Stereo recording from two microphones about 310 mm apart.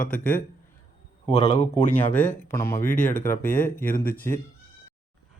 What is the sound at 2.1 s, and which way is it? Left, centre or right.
Speech, centre.